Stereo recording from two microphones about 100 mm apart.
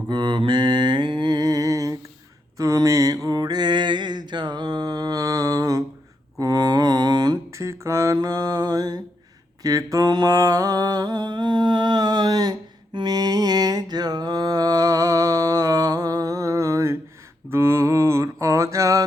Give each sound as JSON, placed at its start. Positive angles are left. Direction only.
{"t": 0.1, "sound": "mantra", "side_deg": -50}
{"t": 6.4, "sound": "a sound", "side_deg": -40}
{"t": 7.6, "sound": "mantra", "side_deg": -30}